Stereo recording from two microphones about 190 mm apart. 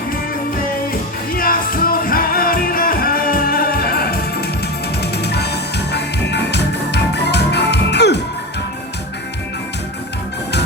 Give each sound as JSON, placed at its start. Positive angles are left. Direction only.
{"t": 1.3, "sound": "music", "side_deg": 50}